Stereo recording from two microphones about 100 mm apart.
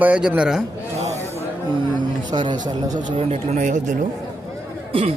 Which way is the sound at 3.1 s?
90° right.